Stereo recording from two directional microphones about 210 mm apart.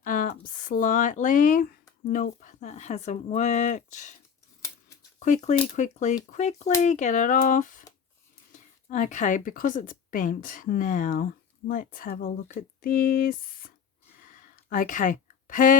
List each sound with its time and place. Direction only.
0.0 s a woman's voice: 40° left (ahead or behind)
5.2 s a woman's voice: 35° left (ahead or behind)
14.2 s a sound: 40° left (ahead or behind)